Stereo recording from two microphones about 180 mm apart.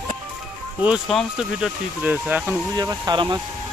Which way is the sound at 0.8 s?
Centre (ahead or behind).